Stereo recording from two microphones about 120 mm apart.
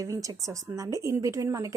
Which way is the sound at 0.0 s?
30° right (ahead or behind).